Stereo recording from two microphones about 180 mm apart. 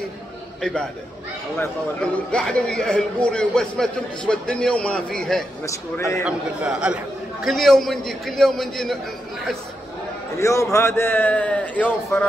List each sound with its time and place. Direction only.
0.6 s a man's voice: 5° left (ahead or behind)
5.7 s a man's voice: 15° left (ahead or behind)
6.2 s a man's voice: 5° right (ahead or behind)
10.4 s a man's voice: 15° left (ahead or behind)